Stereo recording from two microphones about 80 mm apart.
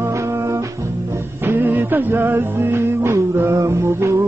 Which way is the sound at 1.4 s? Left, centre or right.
Right.